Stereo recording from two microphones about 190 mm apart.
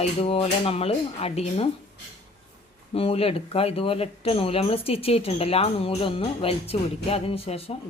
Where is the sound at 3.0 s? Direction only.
30° left (ahead or behind).